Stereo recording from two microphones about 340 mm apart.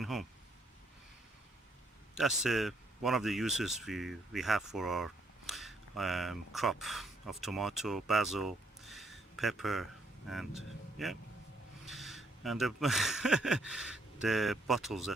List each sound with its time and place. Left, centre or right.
0.0 s speech: centre
2.1 s speech: centre